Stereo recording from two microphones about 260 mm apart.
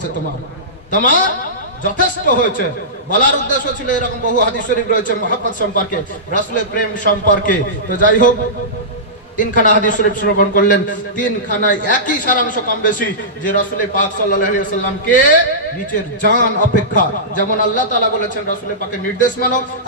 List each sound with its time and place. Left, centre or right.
0.9 s a man's voice: left
9.4 s a man's voice: left
19.2 s a man's voice: left